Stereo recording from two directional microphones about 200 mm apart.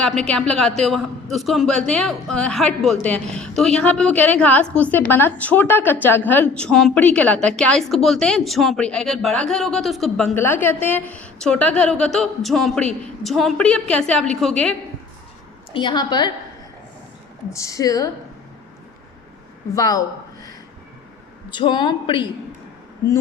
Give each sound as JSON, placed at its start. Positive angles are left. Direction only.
{"t": 0.0, "sound": "a woman's voice", "side_deg": 5}
{"t": 15.7, "sound": "a woman's voice", "side_deg": 25}
{"t": 17.5, "sound": "a woman's voice", "side_deg": 15}
{"t": 19.7, "sound": "speech", "side_deg": 20}
{"t": 21.5, "sound": "a woman's voice", "side_deg": 25}